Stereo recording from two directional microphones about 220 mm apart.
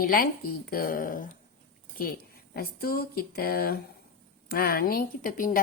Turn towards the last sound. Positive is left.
turn(degrees=40)  # may be behind; listen again after turning